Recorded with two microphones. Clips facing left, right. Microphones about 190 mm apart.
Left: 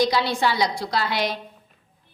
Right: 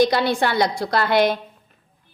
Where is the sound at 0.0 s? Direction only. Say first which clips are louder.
Right 3 dB; 55° right (ahead or behind).